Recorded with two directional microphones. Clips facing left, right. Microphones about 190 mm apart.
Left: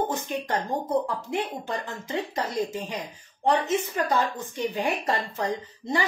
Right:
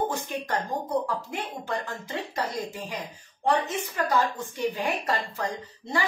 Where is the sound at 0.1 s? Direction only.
20° left (ahead or behind).